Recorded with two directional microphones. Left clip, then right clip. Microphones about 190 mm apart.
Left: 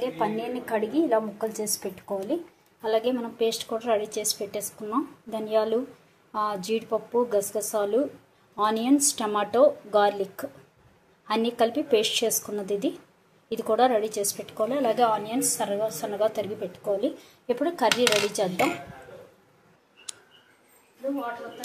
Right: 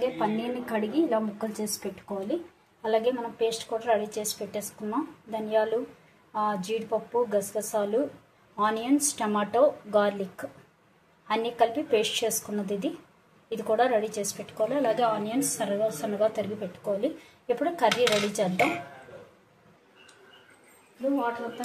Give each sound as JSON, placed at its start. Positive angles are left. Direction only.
{"t": 0.0, "sound": "a woman's voice", "side_deg": 10}